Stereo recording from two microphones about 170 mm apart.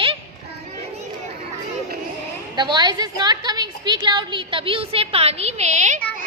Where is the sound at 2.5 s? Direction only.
25° right (ahead or behind); by 6.0 s 45° right (ahead or behind).